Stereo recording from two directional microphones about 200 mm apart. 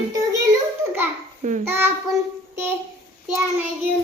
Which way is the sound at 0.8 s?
15° right (ahead or behind).